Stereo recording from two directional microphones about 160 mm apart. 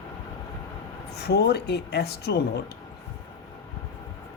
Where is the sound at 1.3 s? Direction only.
90° left.